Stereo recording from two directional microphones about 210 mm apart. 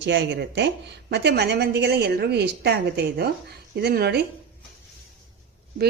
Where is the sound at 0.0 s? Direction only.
55° right (ahead or behind).